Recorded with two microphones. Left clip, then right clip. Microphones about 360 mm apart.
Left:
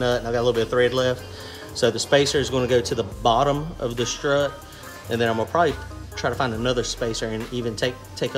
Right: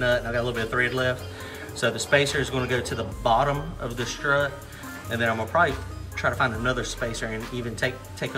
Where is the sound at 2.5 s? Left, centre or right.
Centre.